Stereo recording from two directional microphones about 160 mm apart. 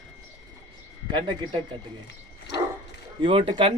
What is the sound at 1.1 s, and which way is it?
Speech, 30° right (ahead or behind).